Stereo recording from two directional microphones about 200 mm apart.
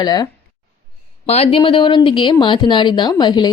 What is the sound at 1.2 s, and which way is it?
A woman's voice, 30° left (ahead or behind).